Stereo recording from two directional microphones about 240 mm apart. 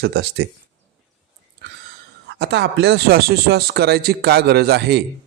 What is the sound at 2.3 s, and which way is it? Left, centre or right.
Speech, right.